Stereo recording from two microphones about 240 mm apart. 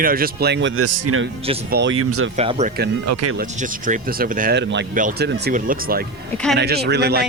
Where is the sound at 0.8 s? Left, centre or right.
Right.